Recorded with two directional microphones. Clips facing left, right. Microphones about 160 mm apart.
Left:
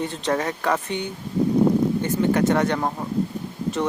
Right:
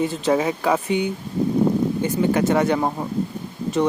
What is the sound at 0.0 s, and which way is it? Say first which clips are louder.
Speech: right 4 dB; 5° right (ahead or behind).